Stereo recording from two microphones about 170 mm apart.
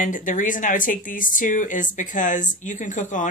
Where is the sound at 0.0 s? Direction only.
50° left (ahead or behind).